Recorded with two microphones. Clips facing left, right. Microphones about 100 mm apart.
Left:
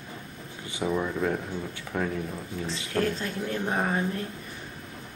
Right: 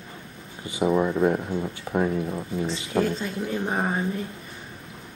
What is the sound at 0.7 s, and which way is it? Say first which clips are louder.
Speech: right 6 dB; 20° right (ahead or behind).